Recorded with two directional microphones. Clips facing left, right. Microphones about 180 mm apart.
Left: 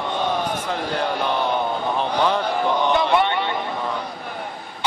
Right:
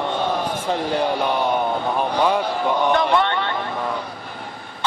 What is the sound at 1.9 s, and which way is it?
Speech, 10° right (ahead or behind).